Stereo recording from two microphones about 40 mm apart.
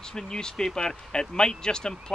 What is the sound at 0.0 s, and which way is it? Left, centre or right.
Speech, centre.